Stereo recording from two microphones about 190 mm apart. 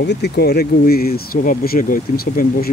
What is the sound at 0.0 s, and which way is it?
Speech, 60° left (ahead or behind).